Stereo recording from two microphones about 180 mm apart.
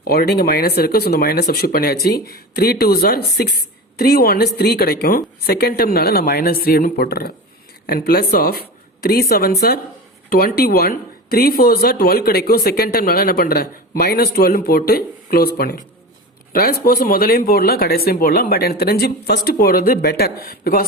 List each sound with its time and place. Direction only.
0.0 s speech: 55° left (ahead or behind)